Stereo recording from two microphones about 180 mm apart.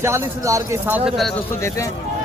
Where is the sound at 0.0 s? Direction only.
15° right (ahead or behind).